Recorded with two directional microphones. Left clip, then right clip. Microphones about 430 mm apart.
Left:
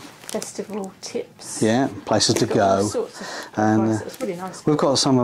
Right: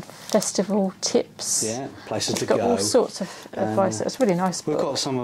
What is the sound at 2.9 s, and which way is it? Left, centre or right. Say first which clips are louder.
Speech: right 6 dB; right.